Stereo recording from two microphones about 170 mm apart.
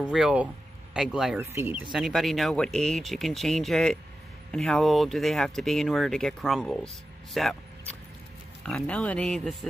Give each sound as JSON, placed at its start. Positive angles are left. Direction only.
{"t": 0.0, "sound": "speech", "side_deg": -5}
{"t": 1.9, "sound": "speech", "side_deg": 0}
{"t": 8.6, "sound": "speech", "side_deg": 5}